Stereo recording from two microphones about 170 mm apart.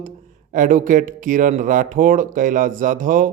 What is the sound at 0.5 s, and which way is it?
Speech, 50° right (ahead or behind).